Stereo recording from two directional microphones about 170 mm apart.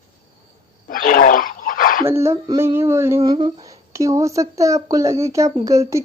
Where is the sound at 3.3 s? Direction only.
30° right (ahead or behind).